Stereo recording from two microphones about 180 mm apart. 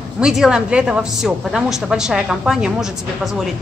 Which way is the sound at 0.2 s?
5° right (ahead or behind).